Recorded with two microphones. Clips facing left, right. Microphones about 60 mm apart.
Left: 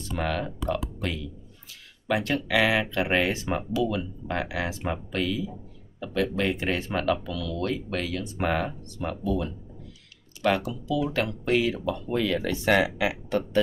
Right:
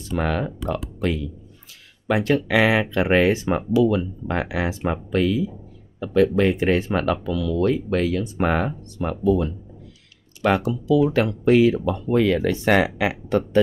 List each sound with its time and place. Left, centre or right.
0.2 s speech: right
10.7 s speech: centre
12.1 s speech: right